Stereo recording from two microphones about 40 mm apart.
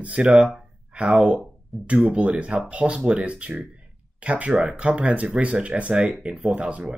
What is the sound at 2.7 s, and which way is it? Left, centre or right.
Speech, right.